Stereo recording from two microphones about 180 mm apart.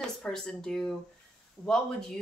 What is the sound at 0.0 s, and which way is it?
Speech, 5° left (ahead or behind).